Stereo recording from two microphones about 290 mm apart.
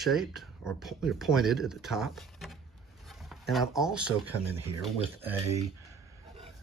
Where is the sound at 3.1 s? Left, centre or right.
Centre.